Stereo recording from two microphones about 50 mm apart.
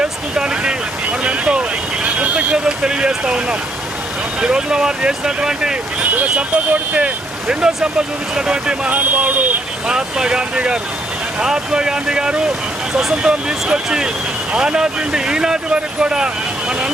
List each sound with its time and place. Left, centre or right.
0.0 s a sound: centre
1.2 s boat: centre
2.0 s speech: right
6.0 s speech: right
7.0 s speech: centre
8.9 s speech: right
9.8 s speech: centre